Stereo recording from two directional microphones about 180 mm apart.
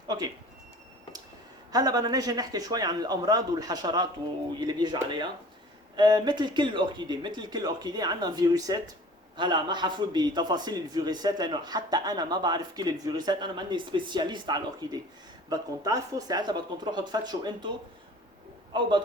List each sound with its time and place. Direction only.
1.7 s a man's voice: 20° right (ahead or behind)
18.7 s a man's voice: 25° right (ahead or behind)